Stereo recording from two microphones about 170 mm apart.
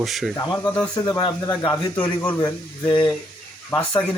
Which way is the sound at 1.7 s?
15° left (ahead or behind).